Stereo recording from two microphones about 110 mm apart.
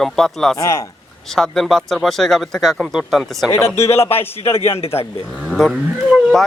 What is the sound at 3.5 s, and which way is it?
A man's voice, 25° left (ahead or behind).